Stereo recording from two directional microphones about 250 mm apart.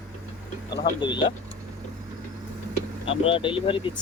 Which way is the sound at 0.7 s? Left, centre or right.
Centre.